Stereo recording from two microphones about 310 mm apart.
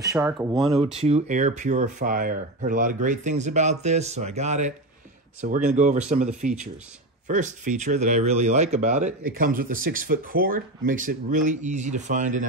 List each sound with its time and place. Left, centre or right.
0.0 s speech: centre
1.0 s speech: right